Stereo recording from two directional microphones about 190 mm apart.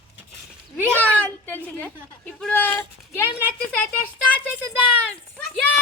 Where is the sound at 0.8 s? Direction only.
10° right (ahead or behind).